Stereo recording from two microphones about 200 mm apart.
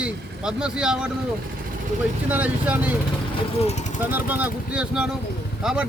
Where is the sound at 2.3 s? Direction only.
5° right (ahead or behind).